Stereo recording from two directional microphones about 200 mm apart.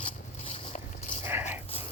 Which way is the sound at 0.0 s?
30° left (ahead or behind).